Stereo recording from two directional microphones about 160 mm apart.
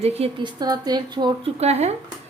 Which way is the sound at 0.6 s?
25° right (ahead or behind).